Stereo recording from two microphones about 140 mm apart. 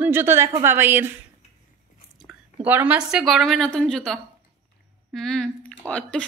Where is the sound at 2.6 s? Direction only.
10° right (ahead or behind).